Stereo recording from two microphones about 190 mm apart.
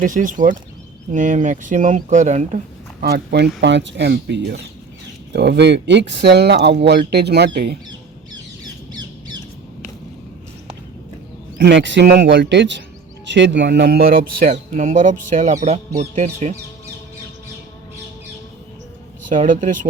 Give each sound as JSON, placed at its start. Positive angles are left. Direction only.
{"t": 0.0, "sound": "speech", "side_deg": -45}
{"t": 3.0, "sound": "speech", "side_deg": -55}
{"t": 8.9, "sound": "squawk", "side_deg": -20}
{"t": 11.5, "sound": "speech", "side_deg": -65}
{"t": 19.3, "sound": "speech", "side_deg": -45}